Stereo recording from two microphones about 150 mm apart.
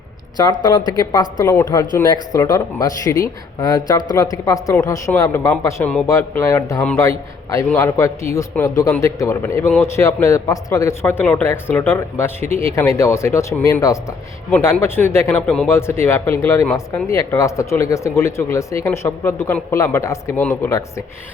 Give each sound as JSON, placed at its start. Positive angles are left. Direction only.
{"t": 0.3, "sound": "speech", "side_deg": 30}